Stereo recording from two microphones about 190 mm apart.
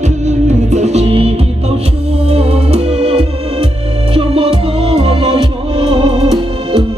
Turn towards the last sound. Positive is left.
turn(degrees=-20)  # may be behind; listen again after turning